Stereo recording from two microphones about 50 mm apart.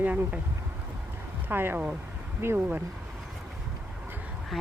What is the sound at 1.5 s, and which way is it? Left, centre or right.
Speech, right.